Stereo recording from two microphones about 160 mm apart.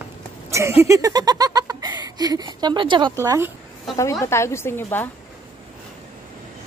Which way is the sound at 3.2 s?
15° right (ahead or behind).